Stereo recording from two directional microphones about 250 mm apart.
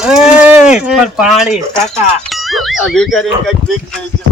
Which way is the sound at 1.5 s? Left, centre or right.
Left.